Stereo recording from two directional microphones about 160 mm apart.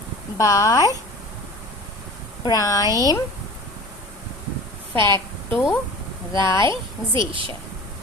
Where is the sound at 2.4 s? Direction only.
20° left (ahead or behind).